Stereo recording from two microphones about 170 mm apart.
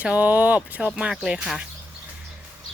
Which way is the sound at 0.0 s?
10° right (ahead or behind).